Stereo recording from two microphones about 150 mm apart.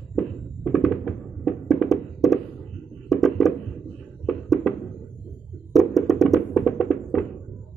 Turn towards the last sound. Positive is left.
turn(degrees=0)  # may be behind; listen again after turning